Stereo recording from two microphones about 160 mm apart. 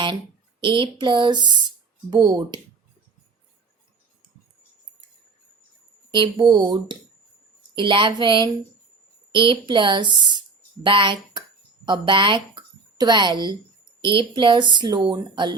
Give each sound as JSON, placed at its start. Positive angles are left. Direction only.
{"t": 0.6, "sound": "speech", "side_deg": -30}
{"t": 6.3, "sound": "a woman's voice", "side_deg": -25}